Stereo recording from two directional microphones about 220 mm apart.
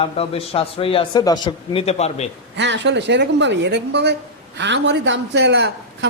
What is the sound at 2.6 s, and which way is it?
A woman's voice, 55° right (ahead or behind).